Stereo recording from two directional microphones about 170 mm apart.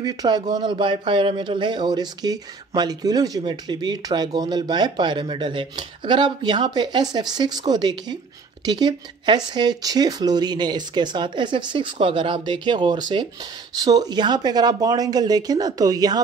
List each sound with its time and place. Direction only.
0.0 s speech: 25° right (ahead or behind)